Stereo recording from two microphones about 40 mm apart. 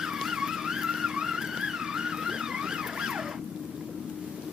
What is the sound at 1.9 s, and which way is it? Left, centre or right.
Music, centre.